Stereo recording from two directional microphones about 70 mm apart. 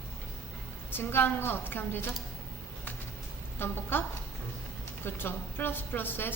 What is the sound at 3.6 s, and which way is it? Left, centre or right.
Speech, left.